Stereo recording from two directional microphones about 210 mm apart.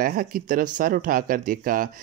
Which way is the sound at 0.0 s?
45° right (ahead or behind).